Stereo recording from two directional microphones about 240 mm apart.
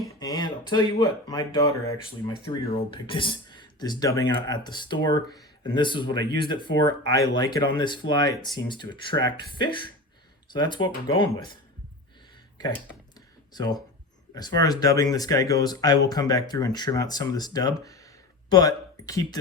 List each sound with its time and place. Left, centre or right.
0.2 s speech: centre
13.5 s speech: centre